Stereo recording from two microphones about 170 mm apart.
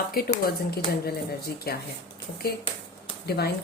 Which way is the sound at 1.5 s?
65° left (ahead or behind).